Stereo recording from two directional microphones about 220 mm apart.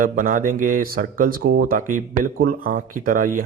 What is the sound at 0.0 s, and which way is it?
Speech, 35° right (ahead or behind).